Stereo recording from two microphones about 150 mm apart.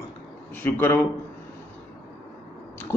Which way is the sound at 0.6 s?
15° left (ahead or behind).